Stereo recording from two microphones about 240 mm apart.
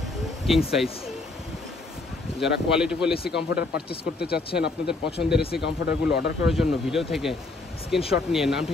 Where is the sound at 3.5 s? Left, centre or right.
Left.